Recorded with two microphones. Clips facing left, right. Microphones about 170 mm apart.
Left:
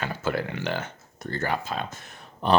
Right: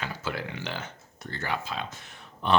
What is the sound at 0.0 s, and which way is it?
Speech, 50° left (ahead or behind).